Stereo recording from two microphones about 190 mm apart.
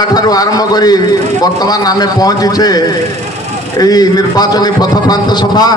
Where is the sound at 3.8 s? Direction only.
20° left (ahead or behind).